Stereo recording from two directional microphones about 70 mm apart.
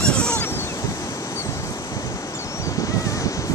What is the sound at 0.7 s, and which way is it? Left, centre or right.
Waves, left.